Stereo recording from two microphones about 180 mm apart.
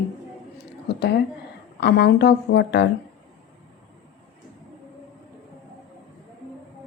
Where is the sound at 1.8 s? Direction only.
65° left (ahead or behind).